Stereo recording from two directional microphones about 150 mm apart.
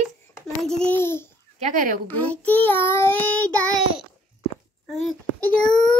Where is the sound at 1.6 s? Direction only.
60° right (ahead or behind).